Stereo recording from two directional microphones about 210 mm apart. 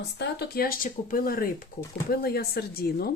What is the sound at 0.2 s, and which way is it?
Speech, 50° left (ahead or behind).